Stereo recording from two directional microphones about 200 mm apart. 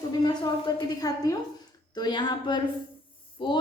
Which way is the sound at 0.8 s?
20° left (ahead or behind).